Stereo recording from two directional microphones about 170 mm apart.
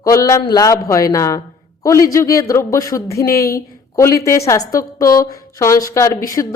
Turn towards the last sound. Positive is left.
turn(degrees=15)  # may be behind; listen again after turning